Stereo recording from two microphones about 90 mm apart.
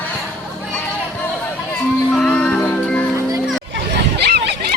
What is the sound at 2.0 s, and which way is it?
Music, 10° left (ahead or behind).